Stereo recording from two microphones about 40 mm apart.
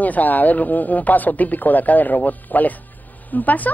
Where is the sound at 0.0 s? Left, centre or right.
Left.